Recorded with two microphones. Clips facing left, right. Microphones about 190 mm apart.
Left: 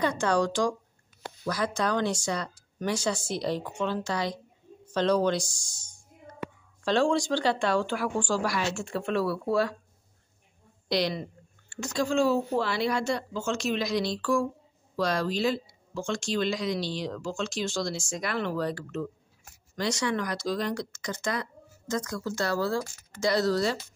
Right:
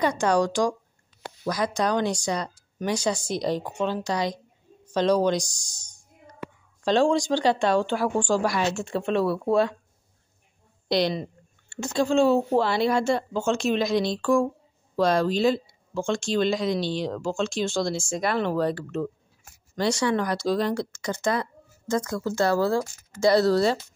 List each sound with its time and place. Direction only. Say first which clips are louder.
0.0 s speech: right 3 dB; 15° right (ahead or behind)
10.9 s speech: right 4 dB; 25° right (ahead or behind)